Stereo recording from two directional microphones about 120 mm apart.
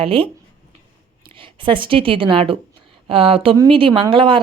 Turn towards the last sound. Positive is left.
turn(degrees=-45)  # may be behind; listen again after turning